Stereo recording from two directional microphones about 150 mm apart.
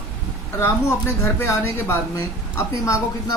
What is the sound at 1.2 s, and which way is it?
Speech, 20° left (ahead or behind).